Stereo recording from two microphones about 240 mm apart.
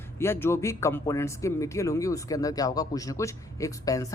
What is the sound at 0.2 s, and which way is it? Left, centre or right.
A man's voice, centre.